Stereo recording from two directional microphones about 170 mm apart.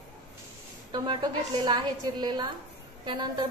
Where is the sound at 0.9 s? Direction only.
25° right (ahead or behind).